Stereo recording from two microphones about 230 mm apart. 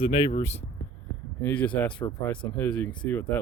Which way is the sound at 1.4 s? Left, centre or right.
Centre.